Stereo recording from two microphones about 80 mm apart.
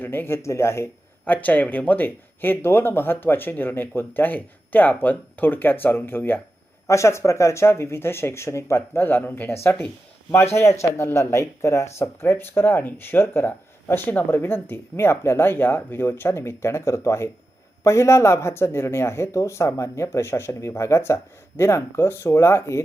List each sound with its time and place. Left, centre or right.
0.0 s a man's voice: left
1.3 s speech: centre
6.8 s speech: left